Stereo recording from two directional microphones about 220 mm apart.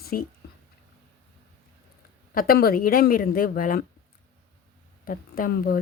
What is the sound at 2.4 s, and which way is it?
Speech, 40° left (ahead or behind).